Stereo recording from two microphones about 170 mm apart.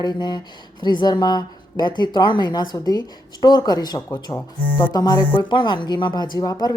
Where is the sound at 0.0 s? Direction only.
25° left (ahead or behind).